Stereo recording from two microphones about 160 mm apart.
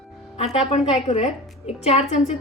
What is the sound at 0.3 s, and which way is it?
A woman's voice, 40° left (ahead or behind).